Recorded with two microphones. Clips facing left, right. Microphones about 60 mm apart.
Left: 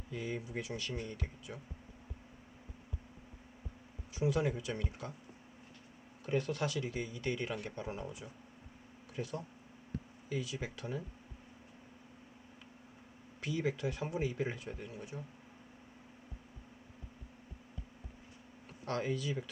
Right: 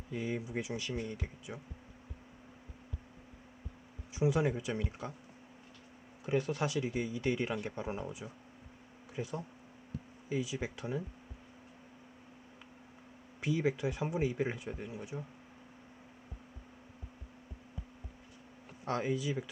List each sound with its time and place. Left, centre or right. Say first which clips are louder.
0.1 s speech: right 3 dB; centre
4.2 s speech: right 2 dB; right
6.2 s speech: right 2 dB; centre
13.4 s speech: right 3 dB; right
18.9 s speech: right 2 dB; centre